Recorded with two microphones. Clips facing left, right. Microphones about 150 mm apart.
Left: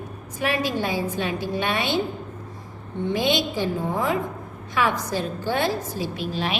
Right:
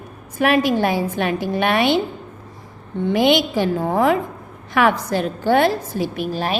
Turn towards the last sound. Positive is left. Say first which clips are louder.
# right 4 dB
turn(degrees=-45)  # may be behind; listen again after turning